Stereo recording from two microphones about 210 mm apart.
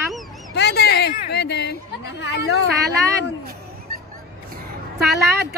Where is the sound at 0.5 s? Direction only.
50° left (ahead or behind).